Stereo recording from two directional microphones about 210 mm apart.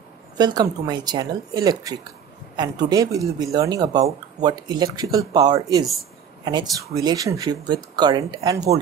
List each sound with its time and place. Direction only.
0.4 s speech: 20° right (ahead or behind)